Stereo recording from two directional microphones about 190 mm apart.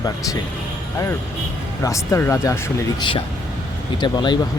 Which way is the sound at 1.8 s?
15° left (ahead or behind).